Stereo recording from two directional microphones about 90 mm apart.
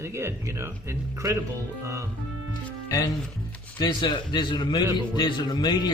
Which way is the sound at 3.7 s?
60° left (ahead or behind).